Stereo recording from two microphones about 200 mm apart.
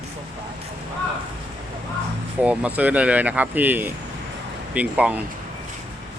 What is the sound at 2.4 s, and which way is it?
Speech, 5° right (ahead or behind).